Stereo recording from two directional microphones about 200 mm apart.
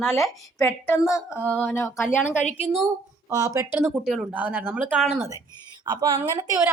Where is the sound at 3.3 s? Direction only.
20° right (ahead or behind); by 5.2 s centre (ahead or behind).